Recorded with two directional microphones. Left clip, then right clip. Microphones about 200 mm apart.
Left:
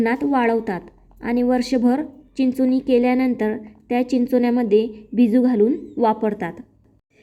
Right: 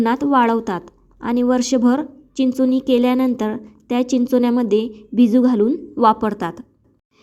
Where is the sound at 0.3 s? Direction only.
25° right (ahead or behind).